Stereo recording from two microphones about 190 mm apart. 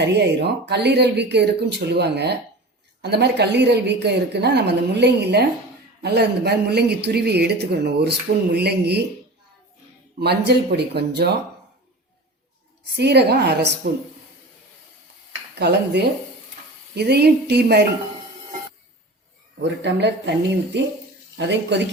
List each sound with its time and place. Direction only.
0.0 s a woman's voice: 65° right (ahead or behind)
10.2 s a woman's voice: 60° right (ahead or behind)
13.0 s a woman's voice: 60° right (ahead or behind)
15.5 s a woman's voice: 60° right (ahead or behind)
19.6 s speech: 65° right (ahead or behind)